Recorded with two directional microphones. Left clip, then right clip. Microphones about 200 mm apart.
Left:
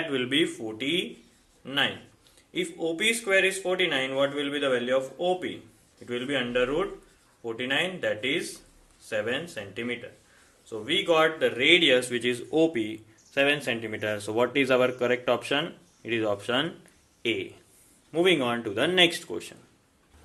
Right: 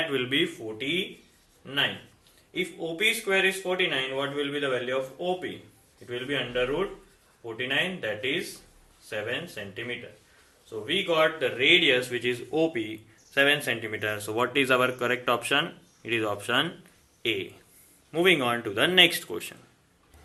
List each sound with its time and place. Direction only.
0.1 s speech: 30° left (ahead or behind); by 9.3 s 45° left (ahead or behind)
10.7 s speech: 45° left (ahead or behind); by 16.7 s 10° left (ahead or behind)
17.2 s speech: 25° left (ahead or behind)